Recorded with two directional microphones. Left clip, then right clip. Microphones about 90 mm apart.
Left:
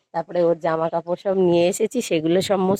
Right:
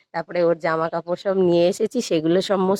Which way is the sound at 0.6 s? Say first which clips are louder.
Even; 5° right (ahead or behind).